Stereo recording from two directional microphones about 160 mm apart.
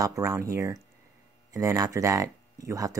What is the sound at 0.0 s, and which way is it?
Speech, 20° right (ahead or behind).